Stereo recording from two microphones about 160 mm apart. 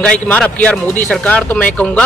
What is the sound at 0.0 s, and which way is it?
Speech, 5° left (ahead or behind).